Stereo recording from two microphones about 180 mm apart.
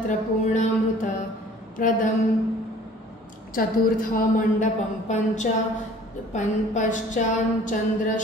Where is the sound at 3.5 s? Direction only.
50° left (ahead or behind).